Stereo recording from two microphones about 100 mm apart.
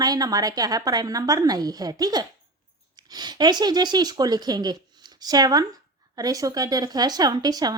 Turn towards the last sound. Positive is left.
turn(degrees=-40)  # may be behind; listen again after turning